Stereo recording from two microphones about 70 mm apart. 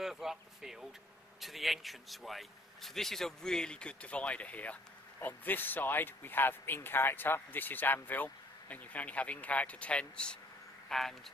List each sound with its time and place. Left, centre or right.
0.0 s a man's voice: centre